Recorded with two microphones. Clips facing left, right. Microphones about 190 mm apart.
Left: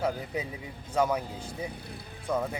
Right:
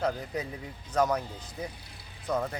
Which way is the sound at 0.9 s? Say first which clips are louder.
Even; 5° left (ahead or behind).